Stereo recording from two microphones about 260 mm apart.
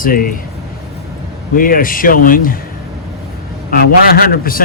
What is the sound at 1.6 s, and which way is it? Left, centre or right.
Speech, left.